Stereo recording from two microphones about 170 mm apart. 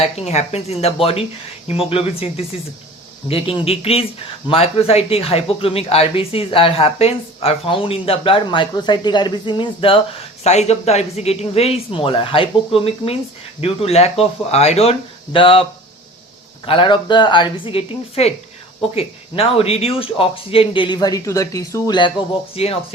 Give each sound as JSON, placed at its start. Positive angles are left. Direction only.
{"t": 0.0, "sound": "speech", "side_deg": 40}
{"t": 16.6, "sound": "speech", "side_deg": 30}